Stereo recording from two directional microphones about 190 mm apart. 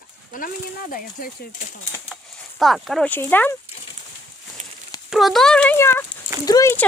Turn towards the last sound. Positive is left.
turn(degrees=20)  # may be behind; listen again after turning